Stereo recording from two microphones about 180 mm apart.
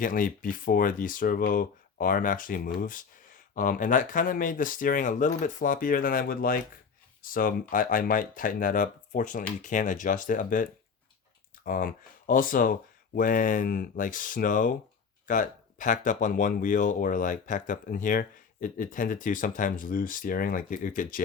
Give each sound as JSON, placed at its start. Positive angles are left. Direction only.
{"t": 0.0, "sound": "speech", "side_deg": 50}